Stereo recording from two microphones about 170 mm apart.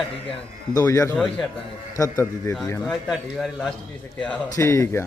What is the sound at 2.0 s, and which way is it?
Speech, 20° left (ahead or behind).